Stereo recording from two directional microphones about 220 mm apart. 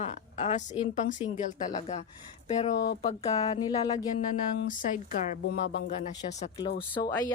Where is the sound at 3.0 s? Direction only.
30° left (ahead or behind).